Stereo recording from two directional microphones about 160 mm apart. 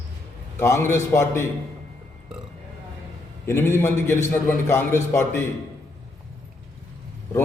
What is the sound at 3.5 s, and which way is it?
A man's voice, 15° left (ahead or behind).